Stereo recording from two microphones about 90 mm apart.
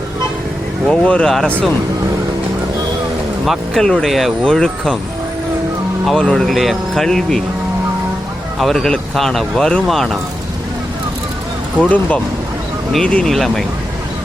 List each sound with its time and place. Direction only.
0.9 s speech: 10° left (ahead or behind)
3.4 s speech: centre (ahead or behind)
6.1 s speech: 5° left (ahead or behind)
8.5 s speech: 5° left (ahead or behind)
11.8 s speech: 15° left (ahead or behind)